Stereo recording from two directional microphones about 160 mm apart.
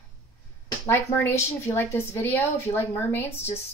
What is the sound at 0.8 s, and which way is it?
Speech, 15° left (ahead or behind).